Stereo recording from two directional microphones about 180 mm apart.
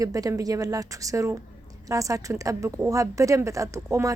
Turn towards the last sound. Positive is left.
turn(degrees=-15)  # may be behind; listen again after turning